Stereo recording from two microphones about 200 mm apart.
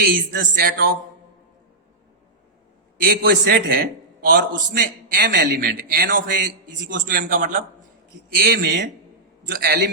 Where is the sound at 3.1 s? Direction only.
50° right (ahead or behind).